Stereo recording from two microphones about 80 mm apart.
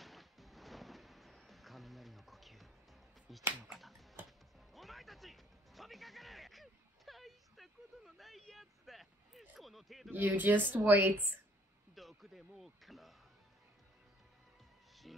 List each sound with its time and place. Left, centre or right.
0.0 s music: centre
3.3 s finger snapping: centre
4.7 s music: centre
10.1 s speech: right
11.9 s a sound: centre
15.0 s a sound: centre